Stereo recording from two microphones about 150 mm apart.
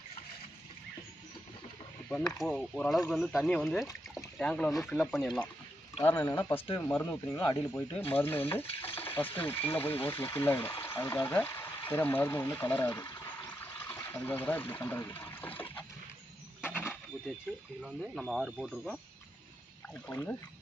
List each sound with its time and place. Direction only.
2.0 s speech: 5° left (ahead or behind)
4.1 s a sound: 5° left (ahead or behind)
4.8 s speech: centre (ahead or behind)
6.0 s speech: 15° left (ahead or behind)
8.1 s stir: 15° left (ahead or behind)
9.1 s speech: 10° left (ahead or behind)
10.8 s a sound: 15° left (ahead or behind)
11.3 s speech: 15° left (ahead or behind)
13.5 s water: 10° left (ahead or behind)
16.6 s wild animals: 10° left (ahead or behind)
17.8 s speech: centre (ahead or behind)
20.1 s speech: 10° left (ahead or behind)